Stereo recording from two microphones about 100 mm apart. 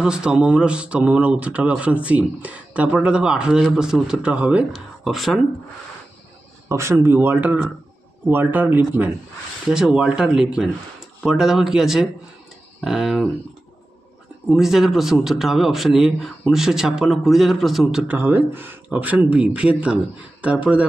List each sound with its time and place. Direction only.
0.0 s speech: 10° right (ahead or behind)
6.7 s speech: 30° right (ahead or behind)
9.7 s speech: 5° right (ahead or behind)
14.4 s speech: 5° right (ahead or behind)
18.0 s speech: 20° right (ahead or behind)